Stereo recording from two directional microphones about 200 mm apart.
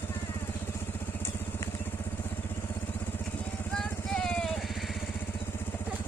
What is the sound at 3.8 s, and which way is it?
Vehicle, 5° left (ahead or behind).